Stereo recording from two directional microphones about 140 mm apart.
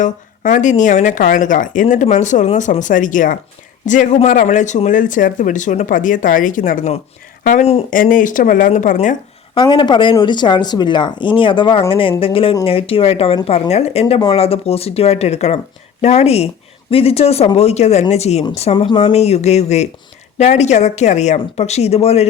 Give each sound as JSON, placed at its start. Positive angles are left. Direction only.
{"t": 0.0, "sound": "speech", "side_deg": 60}
{"t": 7.9, "sound": "speech", "side_deg": 75}
{"t": 9.6, "sound": "speech", "side_deg": 35}